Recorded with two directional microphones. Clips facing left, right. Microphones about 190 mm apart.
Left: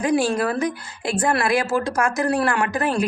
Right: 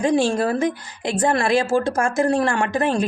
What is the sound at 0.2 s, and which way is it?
A woman's voice, 25° right (ahead or behind).